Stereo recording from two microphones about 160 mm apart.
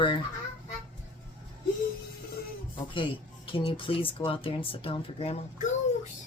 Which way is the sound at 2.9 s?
30° left (ahead or behind).